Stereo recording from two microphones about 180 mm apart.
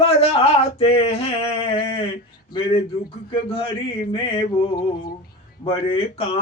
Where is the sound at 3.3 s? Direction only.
30° left (ahead or behind).